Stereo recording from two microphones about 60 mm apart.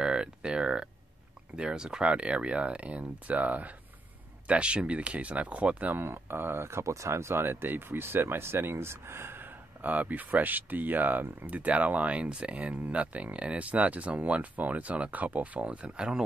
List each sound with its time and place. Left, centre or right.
0.0 s a sound: centre
1.6 s speech: centre
6.0 s speech: right
6.8 s speech: right; by 16.2 s centre